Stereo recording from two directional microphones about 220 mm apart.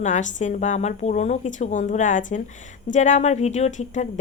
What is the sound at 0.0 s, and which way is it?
Speech, 35° left (ahead or behind).